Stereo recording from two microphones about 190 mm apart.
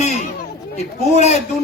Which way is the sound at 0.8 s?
35° left (ahead or behind).